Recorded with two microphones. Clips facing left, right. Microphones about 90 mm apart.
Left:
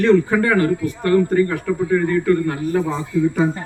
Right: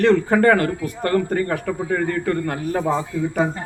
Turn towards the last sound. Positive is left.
turn(degrees=-45)  # may be behind; listen again after turning